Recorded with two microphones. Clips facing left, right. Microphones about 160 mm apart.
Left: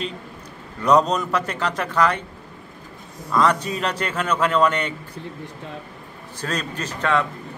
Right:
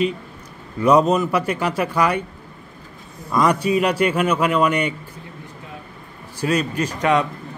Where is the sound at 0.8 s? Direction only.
10° right (ahead or behind).